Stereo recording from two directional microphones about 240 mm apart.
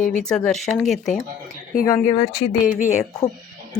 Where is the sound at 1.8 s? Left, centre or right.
Centre.